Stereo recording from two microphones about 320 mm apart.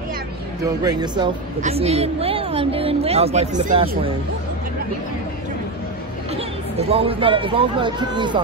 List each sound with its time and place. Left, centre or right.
0.8 s a woman's voice: centre
6.3 s speech: centre